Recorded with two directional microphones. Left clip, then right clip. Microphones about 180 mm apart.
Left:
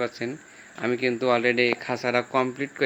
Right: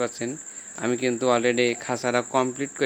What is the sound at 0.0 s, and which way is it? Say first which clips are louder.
Speech: right 1 dB; 10° right (ahead or behind).